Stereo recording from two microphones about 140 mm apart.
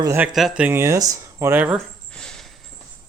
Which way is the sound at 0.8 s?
25° right (ahead or behind).